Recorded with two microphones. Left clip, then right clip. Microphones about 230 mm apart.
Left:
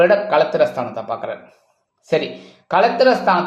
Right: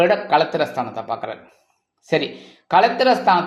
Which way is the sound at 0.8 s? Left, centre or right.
Right.